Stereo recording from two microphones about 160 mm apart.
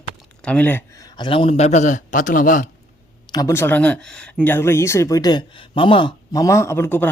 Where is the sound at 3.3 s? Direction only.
20° left (ahead or behind).